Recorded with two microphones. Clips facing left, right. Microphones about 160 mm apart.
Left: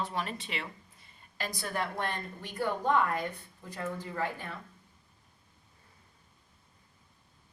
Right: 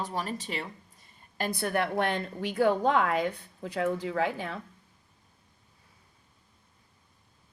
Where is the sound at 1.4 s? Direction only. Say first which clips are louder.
Right 6 dB; 60° right (ahead or behind); by 4.5 s 90° right.